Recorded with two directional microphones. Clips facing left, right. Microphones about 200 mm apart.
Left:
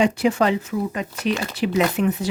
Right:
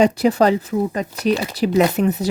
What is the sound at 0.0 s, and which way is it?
Speech, 40° right (ahead or behind).